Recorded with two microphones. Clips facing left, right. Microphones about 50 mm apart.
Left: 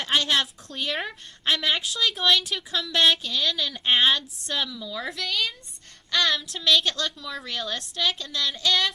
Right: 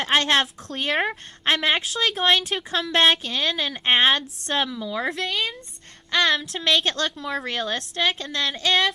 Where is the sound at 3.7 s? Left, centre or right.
Right.